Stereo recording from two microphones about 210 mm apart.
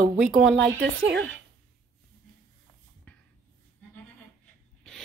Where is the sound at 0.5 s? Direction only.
55° right (ahead or behind).